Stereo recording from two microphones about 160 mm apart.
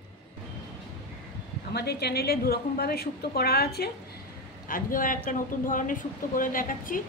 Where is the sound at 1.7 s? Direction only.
90° left.